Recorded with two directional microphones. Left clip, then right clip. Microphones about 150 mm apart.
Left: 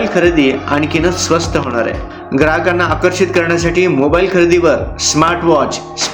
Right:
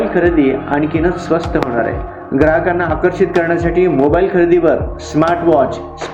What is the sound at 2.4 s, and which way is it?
A man's voice, 15° left (ahead or behind).